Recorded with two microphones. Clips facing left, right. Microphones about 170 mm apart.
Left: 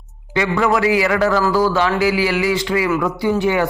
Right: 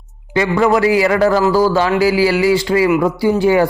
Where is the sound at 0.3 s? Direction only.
35° right (ahead or behind).